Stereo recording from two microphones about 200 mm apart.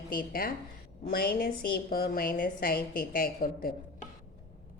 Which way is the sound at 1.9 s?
50° left (ahead or behind).